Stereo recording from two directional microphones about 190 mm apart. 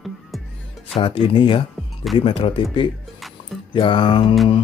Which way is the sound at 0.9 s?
25° left (ahead or behind).